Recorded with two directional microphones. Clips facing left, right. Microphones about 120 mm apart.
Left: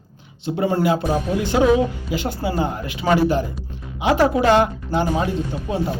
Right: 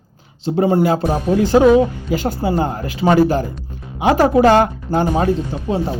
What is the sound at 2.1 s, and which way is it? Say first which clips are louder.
A woman's voice: right 5 dB; 45° right (ahead or behind).